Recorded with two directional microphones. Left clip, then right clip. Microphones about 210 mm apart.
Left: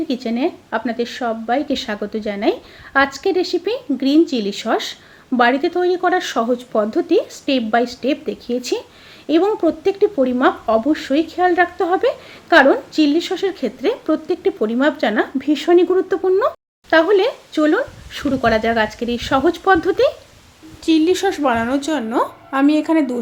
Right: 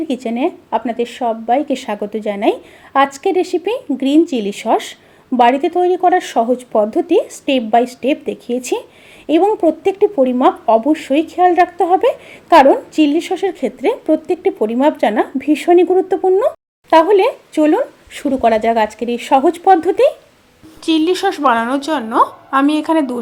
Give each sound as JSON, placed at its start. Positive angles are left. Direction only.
{"t": 0.1, "sound": "speech", "side_deg": -15}
{"t": 20.8, "sound": "a woman's voice", "side_deg": -5}